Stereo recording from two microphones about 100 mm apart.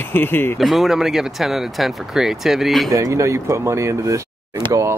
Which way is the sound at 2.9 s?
30° right (ahead or behind).